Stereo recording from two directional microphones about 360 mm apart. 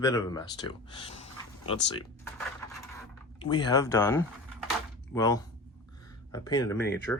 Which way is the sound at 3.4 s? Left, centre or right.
Centre.